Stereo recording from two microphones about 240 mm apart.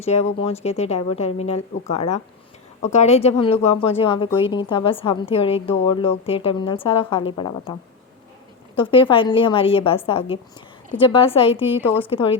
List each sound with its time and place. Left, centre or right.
0.0 s a woman's voice: left